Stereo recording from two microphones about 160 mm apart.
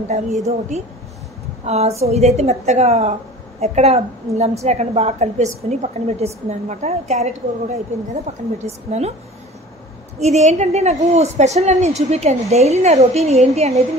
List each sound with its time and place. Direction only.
0.5 s a woman's voice: 45° right (ahead or behind)
10.2 s a woman's voice: 45° right (ahead or behind)